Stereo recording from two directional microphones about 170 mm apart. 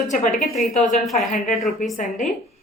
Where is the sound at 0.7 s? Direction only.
50° left (ahead or behind).